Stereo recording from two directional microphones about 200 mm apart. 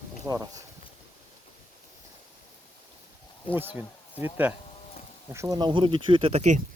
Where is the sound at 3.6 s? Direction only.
10° right (ahead or behind).